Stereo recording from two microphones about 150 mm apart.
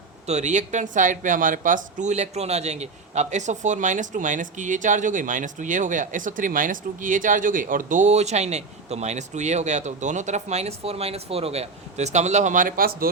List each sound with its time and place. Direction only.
0.3 s speech: 50° right (ahead or behind); by 13.1 s 75° right (ahead or behind)